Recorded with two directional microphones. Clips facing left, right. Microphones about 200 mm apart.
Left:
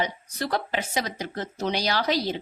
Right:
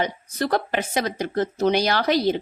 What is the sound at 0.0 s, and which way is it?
Speech, 50° right (ahead or behind).